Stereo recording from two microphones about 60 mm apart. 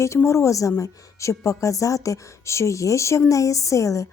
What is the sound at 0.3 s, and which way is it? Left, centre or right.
Speech, left.